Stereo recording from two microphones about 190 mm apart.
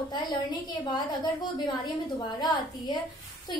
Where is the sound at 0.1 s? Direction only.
20° left (ahead or behind).